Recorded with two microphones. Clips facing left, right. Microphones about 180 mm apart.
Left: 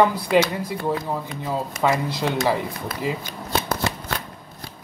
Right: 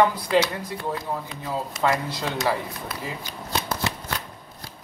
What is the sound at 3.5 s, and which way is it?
Shuffling cards, 55° left (ahead or behind).